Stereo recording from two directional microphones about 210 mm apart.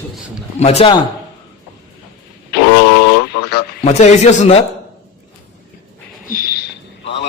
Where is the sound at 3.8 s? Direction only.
35° left (ahead or behind).